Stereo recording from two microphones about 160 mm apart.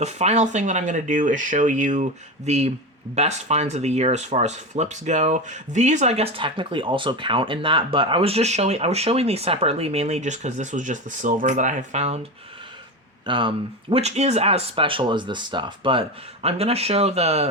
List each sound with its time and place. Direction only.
0.0 s speech: 45° right (ahead or behind)
13.2 s speech: 30° right (ahead or behind)
13.9 s speech: 45° right (ahead or behind)